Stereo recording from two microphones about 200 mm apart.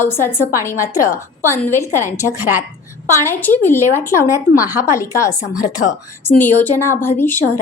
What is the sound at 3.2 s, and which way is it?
A woman's voice, 10° left (ahead or behind).